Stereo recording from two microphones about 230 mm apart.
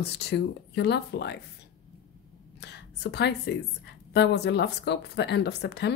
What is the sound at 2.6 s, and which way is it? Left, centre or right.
A woman's voice, left.